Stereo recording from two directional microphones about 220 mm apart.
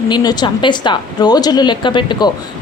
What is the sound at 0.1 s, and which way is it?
A woman's voice, 20° left (ahead or behind).